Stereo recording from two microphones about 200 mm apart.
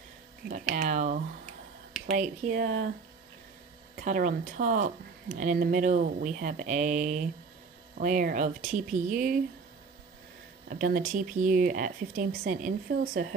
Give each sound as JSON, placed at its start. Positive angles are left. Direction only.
{"t": 0.5, "sound": "speech", "side_deg": -35}
{"t": 3.9, "sound": "speech", "side_deg": -40}
{"t": 10.7, "sound": "speech", "side_deg": -40}